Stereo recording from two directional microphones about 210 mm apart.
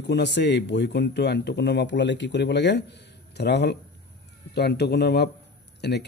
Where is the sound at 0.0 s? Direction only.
55° left (ahead or behind).